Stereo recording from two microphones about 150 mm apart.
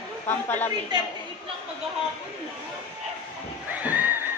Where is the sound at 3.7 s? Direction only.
10° right (ahead or behind).